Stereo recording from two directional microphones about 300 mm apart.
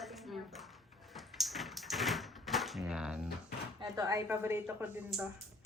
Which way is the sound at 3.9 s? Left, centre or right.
Centre.